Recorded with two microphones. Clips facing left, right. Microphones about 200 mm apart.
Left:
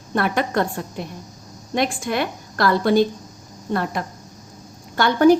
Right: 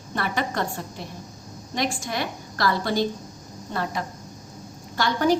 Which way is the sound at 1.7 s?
55° left (ahead or behind).